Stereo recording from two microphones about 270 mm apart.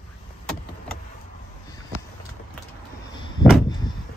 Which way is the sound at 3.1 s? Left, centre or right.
Centre.